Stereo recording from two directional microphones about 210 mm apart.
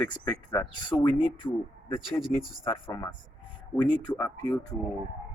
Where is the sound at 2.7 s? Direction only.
25° left (ahead or behind).